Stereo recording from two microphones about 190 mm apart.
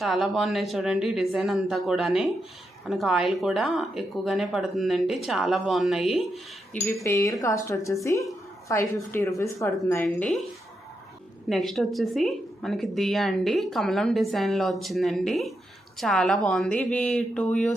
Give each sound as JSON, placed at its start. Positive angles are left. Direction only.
{"t": 0.0, "sound": "a woman's voice", "side_deg": 0}
{"t": 6.8, "sound": "speech", "side_deg": 15}
{"t": 11.4, "sound": "a woman's voice", "side_deg": 0}